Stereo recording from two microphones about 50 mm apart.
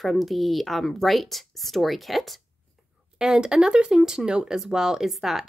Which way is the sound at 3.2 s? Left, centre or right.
Centre.